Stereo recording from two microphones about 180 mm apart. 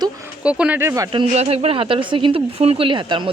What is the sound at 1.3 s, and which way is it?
Speech, 35° right (ahead or behind).